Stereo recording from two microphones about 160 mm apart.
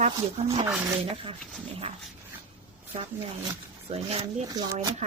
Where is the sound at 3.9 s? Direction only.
40° right (ahead or behind).